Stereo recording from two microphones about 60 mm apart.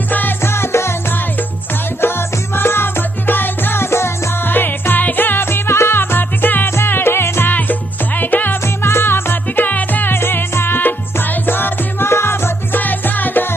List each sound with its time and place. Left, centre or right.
0.1 s music: left
0.4 s music: left
2.0 s music: left
7.5 s music: left
8.6 s music: left
12.8 s music: left